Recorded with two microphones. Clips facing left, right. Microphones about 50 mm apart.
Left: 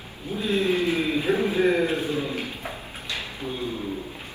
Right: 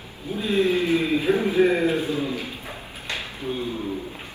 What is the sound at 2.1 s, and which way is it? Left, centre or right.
Speech, left.